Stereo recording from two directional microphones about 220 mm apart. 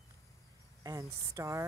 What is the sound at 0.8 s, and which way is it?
Speech, 15° right (ahead or behind).